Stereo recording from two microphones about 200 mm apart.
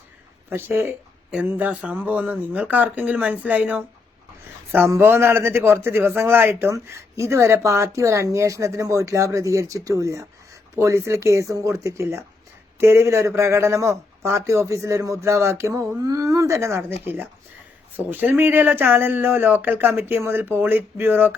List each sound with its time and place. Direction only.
0.5 s a man's voice: 10° right (ahead or behind)
17.9 s a man's voice: 10° right (ahead or behind)